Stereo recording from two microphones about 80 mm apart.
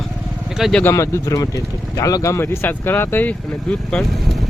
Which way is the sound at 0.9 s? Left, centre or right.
Left.